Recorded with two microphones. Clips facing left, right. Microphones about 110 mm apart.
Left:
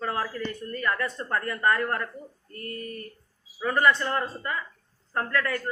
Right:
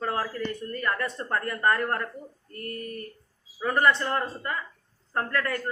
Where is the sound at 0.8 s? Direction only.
30° right (ahead or behind).